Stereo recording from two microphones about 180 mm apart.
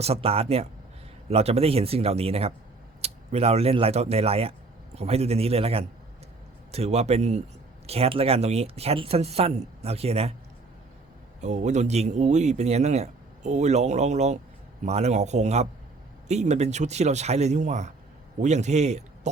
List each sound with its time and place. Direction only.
0.0 s a man's voice: 35° right (ahead or behind)
11.3 s a man's voice: 40° right (ahead or behind)